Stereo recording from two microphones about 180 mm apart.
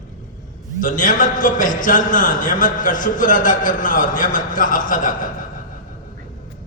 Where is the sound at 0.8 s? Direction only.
45° left (ahead or behind).